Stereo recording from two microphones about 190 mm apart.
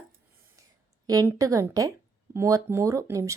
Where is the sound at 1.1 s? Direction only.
20° right (ahead or behind).